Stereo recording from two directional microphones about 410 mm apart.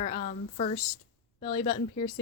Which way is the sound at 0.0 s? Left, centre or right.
Centre.